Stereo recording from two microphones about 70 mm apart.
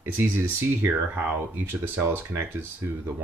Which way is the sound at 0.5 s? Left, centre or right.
Right.